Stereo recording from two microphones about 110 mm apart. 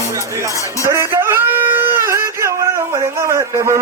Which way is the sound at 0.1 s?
25° right (ahead or behind).